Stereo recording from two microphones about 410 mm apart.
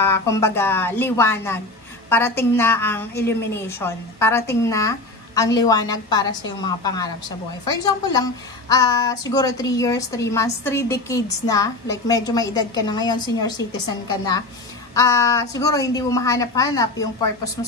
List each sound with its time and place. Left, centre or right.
0.0 s a woman's voice: centre
15.0 s a woman's voice: centre